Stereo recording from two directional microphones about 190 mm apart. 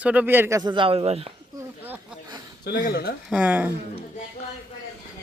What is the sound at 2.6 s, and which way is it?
Speech, 55° left (ahead or behind).